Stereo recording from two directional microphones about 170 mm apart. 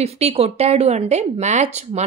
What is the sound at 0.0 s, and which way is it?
A woman's voice, 35° right (ahead or behind).